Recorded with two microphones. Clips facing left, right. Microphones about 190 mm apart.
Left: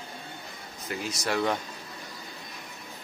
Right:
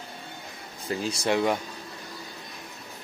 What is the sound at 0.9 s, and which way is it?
Speech, 30° right (ahead or behind).